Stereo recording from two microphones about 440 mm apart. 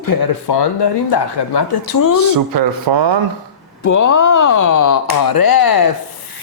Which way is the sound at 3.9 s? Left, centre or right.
Left.